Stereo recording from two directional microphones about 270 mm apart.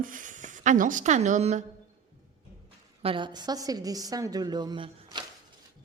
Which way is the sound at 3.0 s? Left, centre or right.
Centre.